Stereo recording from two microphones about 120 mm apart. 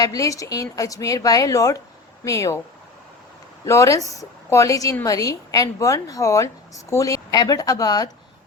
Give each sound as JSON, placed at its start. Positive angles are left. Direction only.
{"t": 0.0, "sound": "speech", "side_deg": 30}
{"t": 3.7, "sound": "speech", "side_deg": 25}